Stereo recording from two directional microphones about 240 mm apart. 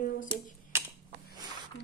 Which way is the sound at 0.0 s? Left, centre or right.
Left.